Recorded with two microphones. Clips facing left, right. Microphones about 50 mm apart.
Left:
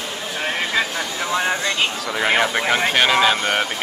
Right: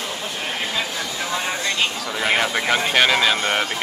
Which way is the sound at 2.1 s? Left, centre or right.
Centre.